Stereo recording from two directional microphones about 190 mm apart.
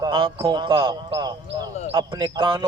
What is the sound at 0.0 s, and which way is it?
Speech, 25° right (ahead or behind).